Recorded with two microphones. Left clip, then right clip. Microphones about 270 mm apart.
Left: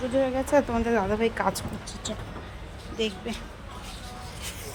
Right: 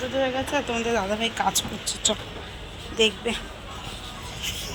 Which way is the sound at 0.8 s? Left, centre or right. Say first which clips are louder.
Even; centre.